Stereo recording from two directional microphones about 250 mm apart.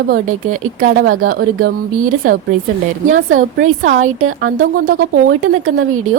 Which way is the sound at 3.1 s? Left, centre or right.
Right.